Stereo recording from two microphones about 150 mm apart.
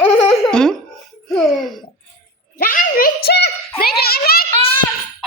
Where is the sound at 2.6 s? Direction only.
70° left (ahead or behind); by 4.4 s 90° left.